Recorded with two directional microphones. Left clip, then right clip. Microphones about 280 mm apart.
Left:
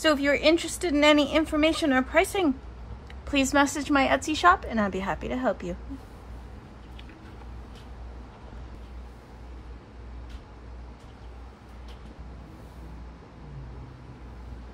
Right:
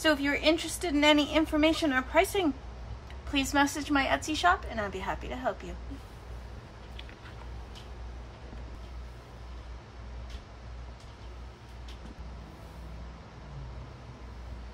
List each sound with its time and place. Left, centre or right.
0.0 s a woman's voice: left